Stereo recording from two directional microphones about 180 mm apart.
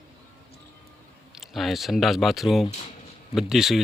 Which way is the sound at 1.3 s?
Centre (ahead or behind).